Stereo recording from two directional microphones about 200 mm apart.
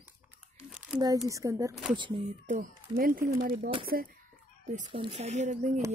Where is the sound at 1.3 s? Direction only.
15° right (ahead or behind).